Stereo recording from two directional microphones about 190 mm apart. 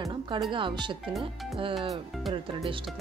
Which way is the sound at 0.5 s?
25° right (ahead or behind).